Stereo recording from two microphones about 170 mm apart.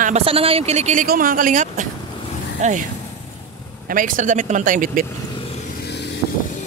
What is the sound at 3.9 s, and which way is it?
Speech, 50° right (ahead or behind).